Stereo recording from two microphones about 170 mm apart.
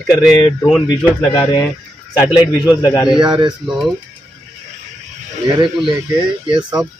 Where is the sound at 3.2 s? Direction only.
25° right (ahead or behind).